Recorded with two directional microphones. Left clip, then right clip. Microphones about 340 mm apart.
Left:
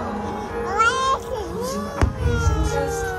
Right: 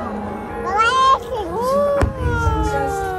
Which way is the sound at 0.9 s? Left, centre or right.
Right.